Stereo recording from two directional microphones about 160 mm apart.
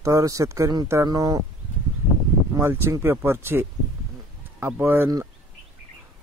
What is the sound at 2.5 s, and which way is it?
A man's voice, 15° right (ahead or behind).